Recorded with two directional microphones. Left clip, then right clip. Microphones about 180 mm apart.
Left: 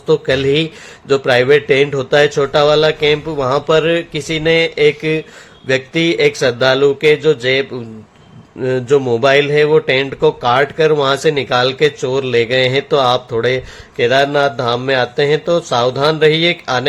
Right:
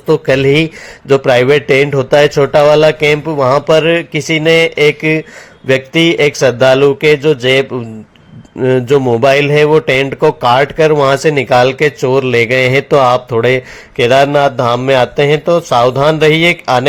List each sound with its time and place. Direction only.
0.1 s speech: 25° right (ahead or behind)